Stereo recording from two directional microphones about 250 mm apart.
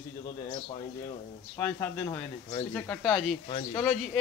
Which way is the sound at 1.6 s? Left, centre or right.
Centre.